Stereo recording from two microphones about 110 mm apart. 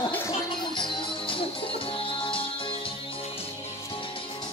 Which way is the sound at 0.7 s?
45° left (ahead or behind).